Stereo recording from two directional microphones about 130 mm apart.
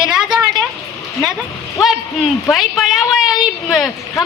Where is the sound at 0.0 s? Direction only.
5° right (ahead or behind).